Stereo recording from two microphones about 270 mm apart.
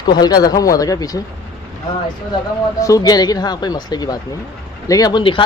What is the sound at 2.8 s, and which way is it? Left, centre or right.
A man's voice, centre.